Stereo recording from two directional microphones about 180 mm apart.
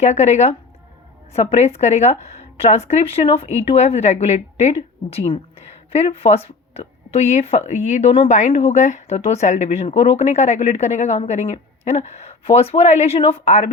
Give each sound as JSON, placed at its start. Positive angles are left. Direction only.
{"t": 0.0, "sound": "speech", "side_deg": 40}